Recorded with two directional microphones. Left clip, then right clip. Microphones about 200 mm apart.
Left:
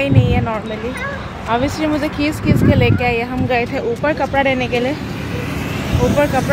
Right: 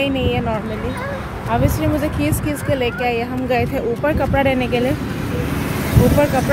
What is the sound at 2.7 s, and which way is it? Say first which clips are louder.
Speech: left 2 dB; 15° left (ahead or behind).